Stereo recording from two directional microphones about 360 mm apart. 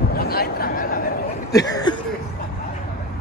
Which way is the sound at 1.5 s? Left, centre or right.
Centre.